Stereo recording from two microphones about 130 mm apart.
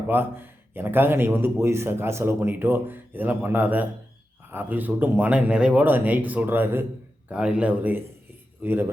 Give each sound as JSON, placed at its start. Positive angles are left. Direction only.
{"t": 0.1, "sound": "a man's voice", "side_deg": -15}